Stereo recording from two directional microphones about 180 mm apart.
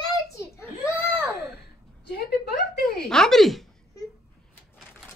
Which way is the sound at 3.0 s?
5° left (ahead or behind).